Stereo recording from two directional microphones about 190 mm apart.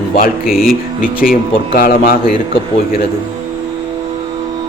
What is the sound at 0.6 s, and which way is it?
A man's voice, 50° left (ahead or behind).